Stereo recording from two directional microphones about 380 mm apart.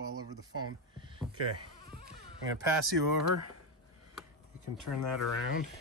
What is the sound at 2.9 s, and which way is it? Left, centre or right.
Speech, right.